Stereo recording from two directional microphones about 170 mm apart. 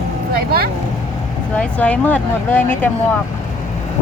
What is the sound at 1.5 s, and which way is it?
Speech, 10° left (ahead or behind).